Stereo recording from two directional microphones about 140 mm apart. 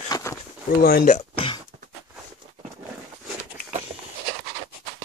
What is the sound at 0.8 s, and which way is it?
Speech, 90° left.